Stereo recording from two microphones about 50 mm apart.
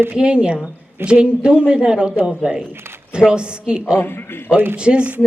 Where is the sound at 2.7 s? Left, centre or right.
Right.